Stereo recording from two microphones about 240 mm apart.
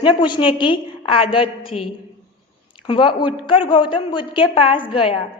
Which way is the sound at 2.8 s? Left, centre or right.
Centre.